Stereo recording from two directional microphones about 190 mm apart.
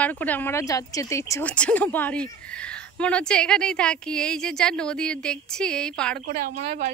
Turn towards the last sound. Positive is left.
turn(degrees=-35)  # may be behind; listen again after turning